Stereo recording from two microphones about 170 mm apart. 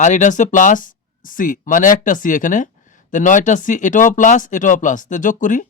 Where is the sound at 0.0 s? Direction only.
45° left (ahead or behind).